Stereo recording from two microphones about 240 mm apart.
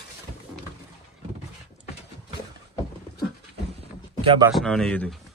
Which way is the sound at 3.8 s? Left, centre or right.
Right.